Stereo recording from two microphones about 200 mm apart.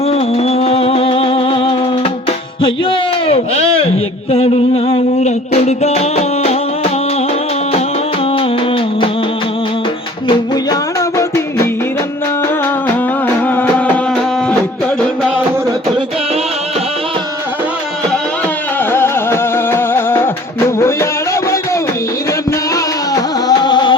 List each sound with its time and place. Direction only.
0.0 s music: 30° left (ahead or behind)
2.6 s speech: 25° left (ahead or behind)
4.3 s music: 30° left (ahead or behind)
8.3 s music: 25° left (ahead or behind)
10.2 s music: 20° left (ahead or behind)
13.2 s music: 10° left (ahead or behind)
18.8 s music: 10° left (ahead or behind)
23.5 s music: 20° left (ahead or behind)